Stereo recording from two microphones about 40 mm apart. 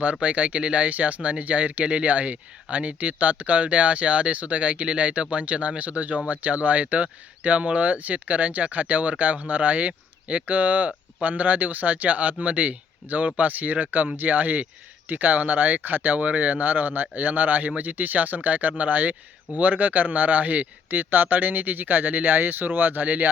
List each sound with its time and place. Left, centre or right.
0.0 s speech: right
16.1 s speech: right